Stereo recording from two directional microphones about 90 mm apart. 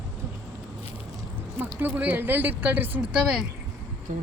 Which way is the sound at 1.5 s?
20° right (ahead or behind).